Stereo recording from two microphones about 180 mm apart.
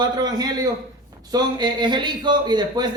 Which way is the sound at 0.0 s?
20° right (ahead or behind).